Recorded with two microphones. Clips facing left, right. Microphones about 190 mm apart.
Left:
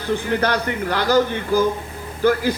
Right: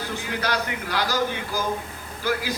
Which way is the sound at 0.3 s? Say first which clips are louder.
Left 4 dB; 55° left (ahead or behind).